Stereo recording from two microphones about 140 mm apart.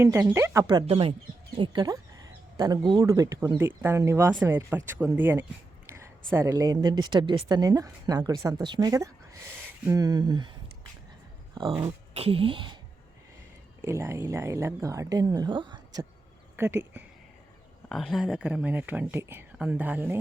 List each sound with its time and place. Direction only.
0.0 s speech: 15° right (ahead or behind)
0.9 s speech: 40° right (ahead or behind)
11.9 s speech: 45° right (ahead or behind)
13.8 s speech: 20° right (ahead or behind)
16.6 s speech: 15° right (ahead or behind)
17.8 s speech: centre (ahead or behind)